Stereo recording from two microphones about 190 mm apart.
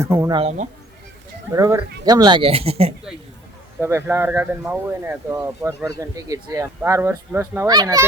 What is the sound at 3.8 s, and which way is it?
Speech, 10° right (ahead or behind).